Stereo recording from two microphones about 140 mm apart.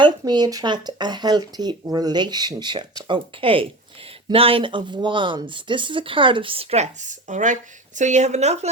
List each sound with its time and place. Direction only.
0.0 s speech: 30° right (ahead or behind); by 8.7 s 50° right (ahead or behind)